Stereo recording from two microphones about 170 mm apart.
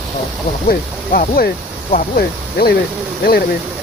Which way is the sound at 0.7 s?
60° left (ahead or behind).